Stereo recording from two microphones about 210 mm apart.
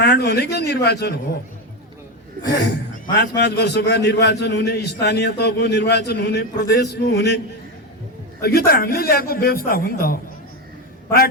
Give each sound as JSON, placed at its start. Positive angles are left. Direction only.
{"t": 0.0, "sound": "a man's voice", "side_deg": 50}
{"t": 3.2, "sound": "a man's voice", "side_deg": 55}